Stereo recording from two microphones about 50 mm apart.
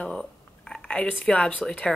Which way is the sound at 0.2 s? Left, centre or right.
Centre.